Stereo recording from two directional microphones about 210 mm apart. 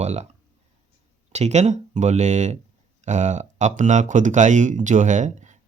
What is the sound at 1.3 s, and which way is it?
Speech, 30° right (ahead or behind).